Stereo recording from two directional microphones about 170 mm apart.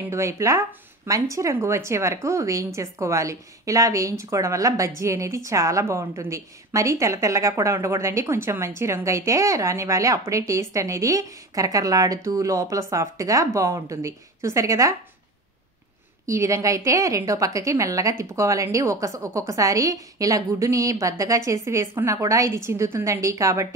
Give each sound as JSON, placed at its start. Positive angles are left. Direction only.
{"t": 0.1, "sound": "speech", "side_deg": -15}
{"t": 16.3, "sound": "a woman's voice", "side_deg": -15}